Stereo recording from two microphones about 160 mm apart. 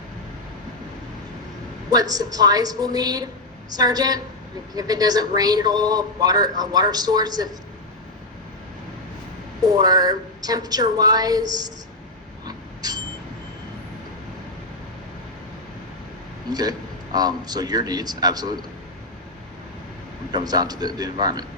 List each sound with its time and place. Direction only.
1.9 s a man's voice: 25° right (ahead or behind)
9.8 s a man's voice: 25° right (ahead or behind)
12.5 s a sound: 25° right (ahead or behind)
16.5 s a man's voice: 25° right (ahead or behind)
20.3 s a man's voice: 25° right (ahead or behind)